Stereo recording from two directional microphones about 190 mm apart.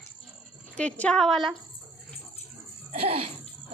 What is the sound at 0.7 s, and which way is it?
Speech, 5° left (ahead or behind).